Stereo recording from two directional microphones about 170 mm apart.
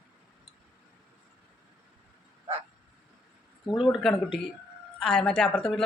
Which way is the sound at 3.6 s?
30° left (ahead or behind).